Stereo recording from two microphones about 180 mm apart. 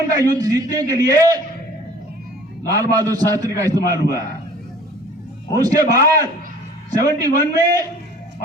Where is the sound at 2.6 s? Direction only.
20° right (ahead or behind).